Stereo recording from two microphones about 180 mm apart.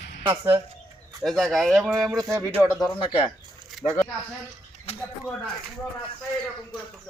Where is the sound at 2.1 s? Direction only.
20° right (ahead or behind).